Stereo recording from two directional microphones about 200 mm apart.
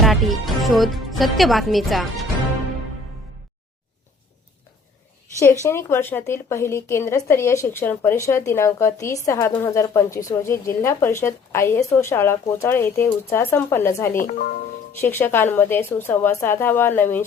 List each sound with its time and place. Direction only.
0.0 s speech: centre (ahead or behind)
5.6 s a woman's voice: 10° left (ahead or behind)
14.2 s speech: 40° left (ahead or behind)
15.0 s a woman's voice: 10° left (ahead or behind)